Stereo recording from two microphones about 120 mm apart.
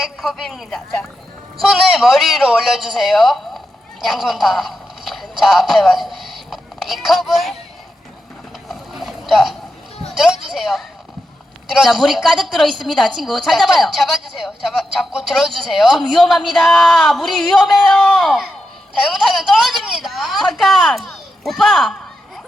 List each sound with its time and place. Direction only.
0.0 s a woman's voice: centre (ahead or behind)
8.7 s boat: centre (ahead or behind)
10.2 s a woman's voice: centre (ahead or behind)